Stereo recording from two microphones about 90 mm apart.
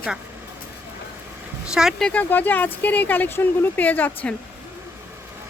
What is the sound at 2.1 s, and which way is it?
Speech, 20° left (ahead or behind).